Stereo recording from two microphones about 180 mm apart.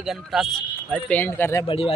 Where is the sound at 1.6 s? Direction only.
30° left (ahead or behind).